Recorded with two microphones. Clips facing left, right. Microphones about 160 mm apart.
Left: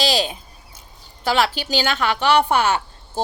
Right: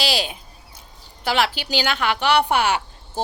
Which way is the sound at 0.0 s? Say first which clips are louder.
Left 3 dB; 40° left (ahead or behind).